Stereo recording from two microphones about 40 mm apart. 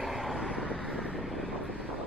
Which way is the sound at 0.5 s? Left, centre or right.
Right.